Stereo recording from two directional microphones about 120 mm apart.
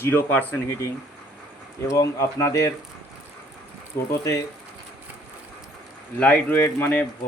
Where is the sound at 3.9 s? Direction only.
20° left (ahead or behind).